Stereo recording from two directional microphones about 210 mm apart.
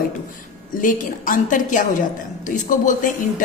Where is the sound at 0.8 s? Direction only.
40° left (ahead or behind).